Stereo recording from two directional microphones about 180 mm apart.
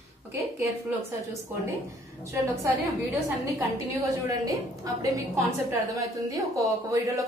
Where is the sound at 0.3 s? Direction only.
15° right (ahead or behind).